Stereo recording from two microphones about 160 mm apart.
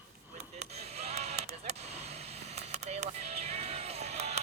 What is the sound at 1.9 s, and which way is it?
Vehicle, 40° right (ahead or behind).